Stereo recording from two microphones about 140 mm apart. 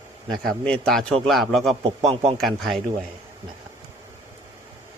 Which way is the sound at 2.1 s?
50° right (ahead or behind).